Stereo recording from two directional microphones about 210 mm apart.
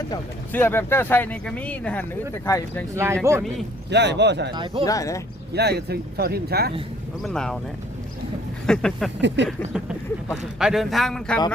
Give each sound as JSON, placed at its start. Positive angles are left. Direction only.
{"t": 0.5, "sound": "speech", "side_deg": 10}
{"t": 2.9, "sound": "speech", "side_deg": -15}
{"t": 3.8, "sound": "speech", "side_deg": -55}
{"t": 4.5, "sound": "speech", "side_deg": -25}
{"t": 4.9, "sound": "speech", "side_deg": 15}
{"t": 5.5, "sound": "speech", "side_deg": -50}
{"t": 7.2, "sound": "speech", "side_deg": 0}
{"t": 8.6, "sound": "speech", "side_deg": 5}
{"t": 9.2, "sound": "speech", "side_deg": -55}
{"t": 10.6, "sound": "speech", "side_deg": 0}